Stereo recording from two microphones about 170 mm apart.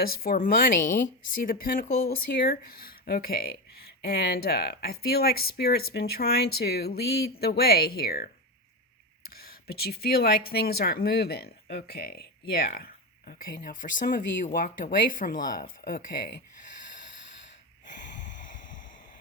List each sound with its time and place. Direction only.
0.0 s speech: 60° left (ahead or behind)
9.3 s speech: 65° left (ahead or behind)
18.3 s a sound: 50° left (ahead or behind)